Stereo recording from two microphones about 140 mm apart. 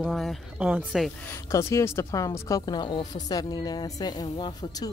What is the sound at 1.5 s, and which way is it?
Speech, 20° left (ahead or behind).